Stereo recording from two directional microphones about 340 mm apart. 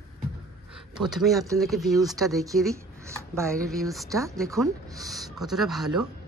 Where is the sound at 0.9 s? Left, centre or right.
Centre.